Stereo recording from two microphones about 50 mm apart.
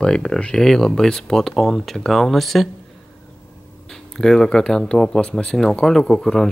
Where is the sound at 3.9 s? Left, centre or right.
Centre.